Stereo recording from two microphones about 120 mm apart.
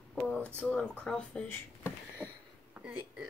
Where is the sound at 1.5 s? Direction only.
20° left (ahead or behind).